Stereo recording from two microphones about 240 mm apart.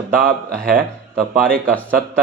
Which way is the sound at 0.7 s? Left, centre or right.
Right.